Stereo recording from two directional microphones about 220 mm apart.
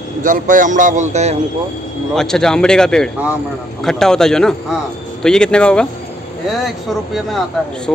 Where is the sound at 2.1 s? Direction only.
Centre (ahead or behind).